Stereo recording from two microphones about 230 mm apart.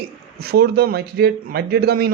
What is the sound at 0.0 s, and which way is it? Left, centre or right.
A man's voice, right.